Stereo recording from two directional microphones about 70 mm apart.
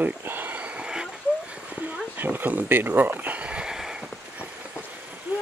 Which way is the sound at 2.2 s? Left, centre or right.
Right.